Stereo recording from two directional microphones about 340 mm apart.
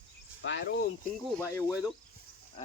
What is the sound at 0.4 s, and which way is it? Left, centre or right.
Speech, left.